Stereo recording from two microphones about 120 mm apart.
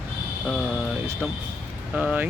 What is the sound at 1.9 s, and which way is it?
Speech, 10° right (ahead or behind).